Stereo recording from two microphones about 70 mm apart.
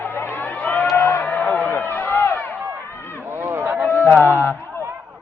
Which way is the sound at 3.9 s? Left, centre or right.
Left.